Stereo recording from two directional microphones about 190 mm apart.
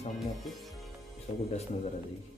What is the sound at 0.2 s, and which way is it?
Speech, centre (ahead or behind).